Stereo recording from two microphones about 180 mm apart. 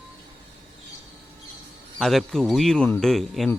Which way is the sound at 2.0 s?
Centre (ahead or behind).